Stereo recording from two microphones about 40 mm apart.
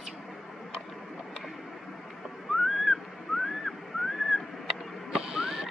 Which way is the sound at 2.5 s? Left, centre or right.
Centre.